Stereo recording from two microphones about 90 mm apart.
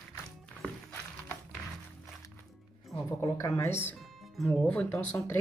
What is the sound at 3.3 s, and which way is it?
Speech, 30° left (ahead or behind).